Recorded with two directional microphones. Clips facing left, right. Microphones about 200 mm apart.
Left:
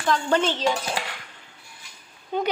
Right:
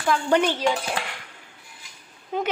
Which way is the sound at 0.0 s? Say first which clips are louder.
Right 1 dB; 10° right (ahead or behind).